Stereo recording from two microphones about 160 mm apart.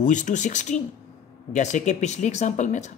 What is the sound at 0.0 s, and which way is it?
Speech, 50° left (ahead or behind).